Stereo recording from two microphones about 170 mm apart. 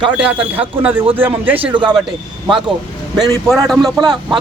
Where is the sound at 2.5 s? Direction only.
30° right (ahead or behind).